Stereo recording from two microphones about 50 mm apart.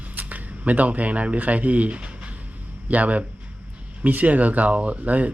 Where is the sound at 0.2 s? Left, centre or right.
Right.